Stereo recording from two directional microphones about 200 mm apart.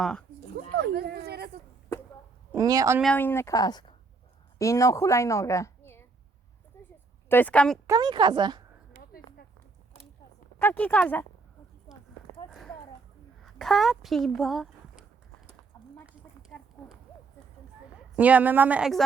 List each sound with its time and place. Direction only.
0.0 s speech: 5° left (ahead or behind)
0.7 s a sound: 55° right (ahead or behind)
2.6 s a woman's voice: 20° right (ahead or behind)
3.0 s a woman's voice: 5° left (ahead or behind)
6.7 s a sound: 10° left (ahead or behind)
7.3 s a woman's voice: 10° left (ahead or behind)
7.9 s speech: 20° right (ahead or behind)
10.6 s a woman's voice: 10° left (ahead or behind)
13.4 s speech: centre (ahead or behind)
16.5 s a sound: 5° left (ahead or behind)
18.2 s a woman's voice: 5° right (ahead or behind)